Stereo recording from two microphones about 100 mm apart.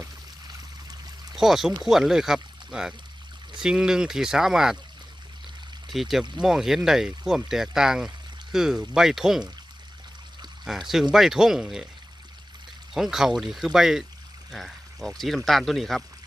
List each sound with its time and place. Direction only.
0.4 s a sound: 45° right (ahead or behind)
1.4 s speech: 5° right (ahead or behind)
5.9 s speech: centre (ahead or behind)
10.7 s speech: centre (ahead or behind)
12.9 s speech: 5° right (ahead or behind)